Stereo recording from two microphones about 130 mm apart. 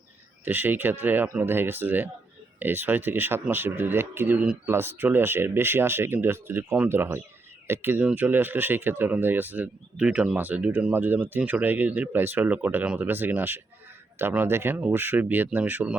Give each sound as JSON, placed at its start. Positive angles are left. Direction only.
{"t": 0.4, "sound": "speech", "side_deg": -15}